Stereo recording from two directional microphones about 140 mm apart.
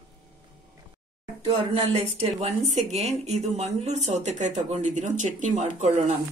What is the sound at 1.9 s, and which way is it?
Speech, 45° right (ahead or behind).